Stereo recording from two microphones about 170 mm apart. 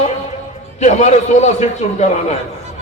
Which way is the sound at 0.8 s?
45° left (ahead or behind).